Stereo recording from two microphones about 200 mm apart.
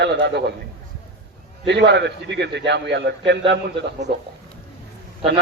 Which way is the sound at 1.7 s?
60° right (ahead or behind).